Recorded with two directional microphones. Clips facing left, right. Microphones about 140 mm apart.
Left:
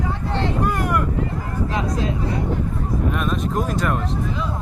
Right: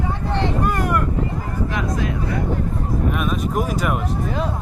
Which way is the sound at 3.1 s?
5° right (ahead or behind).